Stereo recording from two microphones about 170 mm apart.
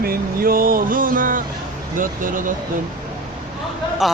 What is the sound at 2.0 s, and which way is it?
Speech, 55° right (ahead or behind).